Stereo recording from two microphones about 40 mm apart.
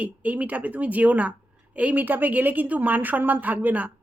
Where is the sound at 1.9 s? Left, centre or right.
Right.